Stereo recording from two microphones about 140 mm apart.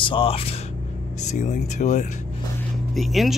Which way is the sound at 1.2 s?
60° left (ahead or behind).